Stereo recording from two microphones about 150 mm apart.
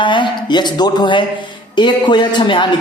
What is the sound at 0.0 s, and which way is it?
A man's voice, 30° left (ahead or behind).